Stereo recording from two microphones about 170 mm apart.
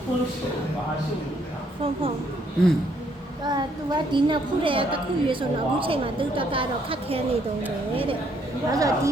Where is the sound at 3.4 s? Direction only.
25° right (ahead or behind).